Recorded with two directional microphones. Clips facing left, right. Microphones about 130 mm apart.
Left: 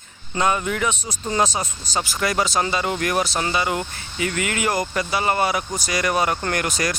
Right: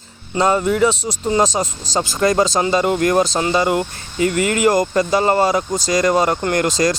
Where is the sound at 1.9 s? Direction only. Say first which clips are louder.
Right 4 dB; 90° right.